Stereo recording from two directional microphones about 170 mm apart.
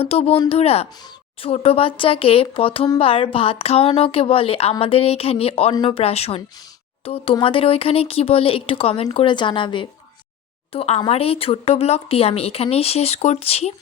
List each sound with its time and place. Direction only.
0.0 s speech: 35° left (ahead or behind)